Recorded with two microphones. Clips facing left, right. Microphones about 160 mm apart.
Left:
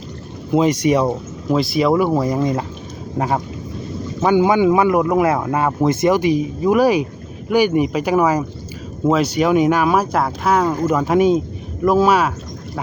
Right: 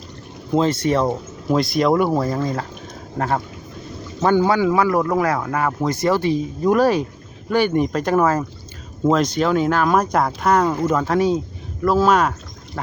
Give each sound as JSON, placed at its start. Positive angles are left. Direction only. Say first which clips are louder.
{"t": 0.5, "sound": "speech", "louder": "left 3 dB", "side_deg": 10}
{"t": 1.5, "sound": "speech", "louder": "left 1 dB", "side_deg": 0}
{"t": 2.2, "sound": "speech", "louder": "left 4 dB", "side_deg": 15}